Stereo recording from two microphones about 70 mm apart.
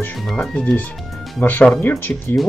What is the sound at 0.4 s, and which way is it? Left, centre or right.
Speech, centre.